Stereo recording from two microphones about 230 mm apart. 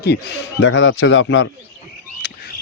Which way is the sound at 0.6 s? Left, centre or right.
Left.